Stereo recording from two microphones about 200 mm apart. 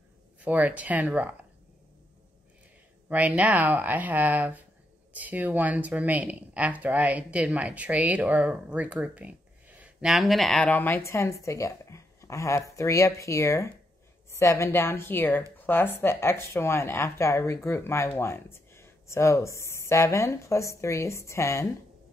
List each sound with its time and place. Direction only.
0.4 s speech: 10° right (ahead or behind)
3.1 s speech: 5° right (ahead or behind); by 21.6 s 15° left (ahead or behind)